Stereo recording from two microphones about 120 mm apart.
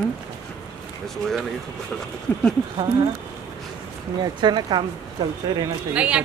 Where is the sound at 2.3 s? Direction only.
20° left (ahead or behind).